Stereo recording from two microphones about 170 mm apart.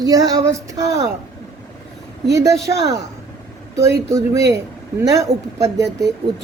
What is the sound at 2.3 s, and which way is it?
Speech, 20° right (ahead or behind).